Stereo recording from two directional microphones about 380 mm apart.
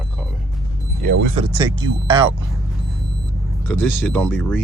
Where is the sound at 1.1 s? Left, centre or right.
Right.